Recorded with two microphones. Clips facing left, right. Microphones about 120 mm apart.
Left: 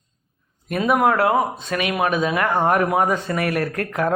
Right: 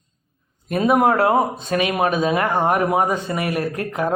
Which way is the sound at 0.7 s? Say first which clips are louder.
Right 2 dB; 30° right (ahead or behind).